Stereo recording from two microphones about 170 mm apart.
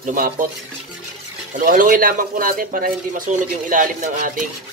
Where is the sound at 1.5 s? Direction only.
55° right (ahead or behind).